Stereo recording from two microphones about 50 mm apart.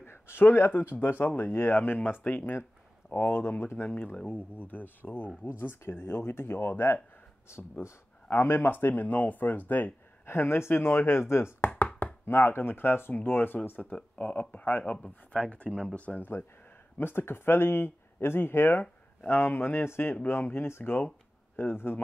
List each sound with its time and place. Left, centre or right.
0.0 s speech: left
0.9 s speech: left
3.3 s speech: left
3.9 s speech: left
5.4 s speech: left
10.2 s speech: left
12.3 s speech: left
17.0 s speech: left